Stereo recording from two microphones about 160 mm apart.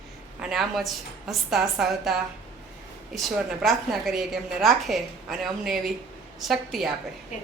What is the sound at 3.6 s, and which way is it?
Speech, centre (ahead or behind).